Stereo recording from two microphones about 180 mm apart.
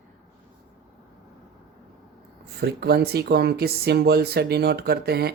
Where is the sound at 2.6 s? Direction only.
65° right (ahead or behind).